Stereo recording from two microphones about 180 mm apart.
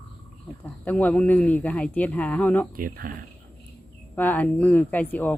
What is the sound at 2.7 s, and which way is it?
Speech, 50° right (ahead or behind).